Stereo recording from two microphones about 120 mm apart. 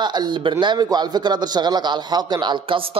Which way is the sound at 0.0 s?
40° right (ahead or behind).